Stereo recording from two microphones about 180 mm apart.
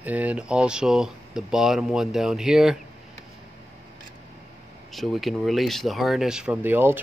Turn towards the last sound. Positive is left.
turn(degrees=-10)  # may be behind; listen again after turning